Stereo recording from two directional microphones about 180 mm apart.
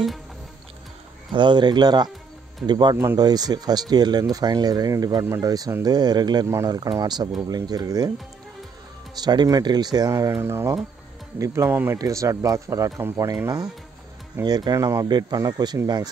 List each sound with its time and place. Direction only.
1.3 s speech: 25° right (ahead or behind)
9.2 s speech: 25° right (ahead or behind)